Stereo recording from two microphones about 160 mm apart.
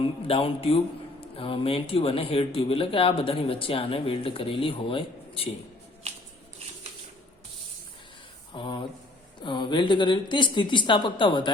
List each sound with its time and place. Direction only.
0.0 s speech: 35° left (ahead or behind)
8.5 s a sound: 30° left (ahead or behind)
9.4 s speech: 30° left (ahead or behind)